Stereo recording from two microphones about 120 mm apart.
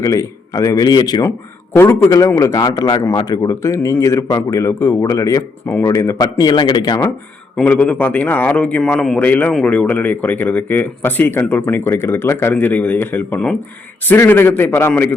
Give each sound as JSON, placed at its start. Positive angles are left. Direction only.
{"t": 0.0, "sound": "speech", "side_deg": 30}
{"t": 1.7, "sound": "a man's voice", "side_deg": 20}
{"t": 7.5, "sound": "speech", "side_deg": 10}